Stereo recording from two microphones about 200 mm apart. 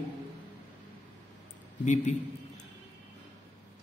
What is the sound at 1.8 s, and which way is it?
Speech, 35° left (ahead or behind).